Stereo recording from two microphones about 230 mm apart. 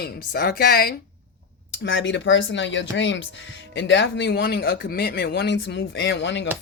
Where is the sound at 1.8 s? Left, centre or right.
Left.